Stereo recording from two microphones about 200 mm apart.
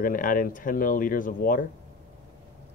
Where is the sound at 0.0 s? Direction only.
45° left (ahead or behind).